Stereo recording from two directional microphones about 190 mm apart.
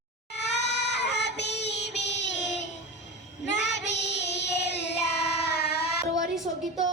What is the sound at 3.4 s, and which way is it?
Child singing, 65° left (ahead or behind).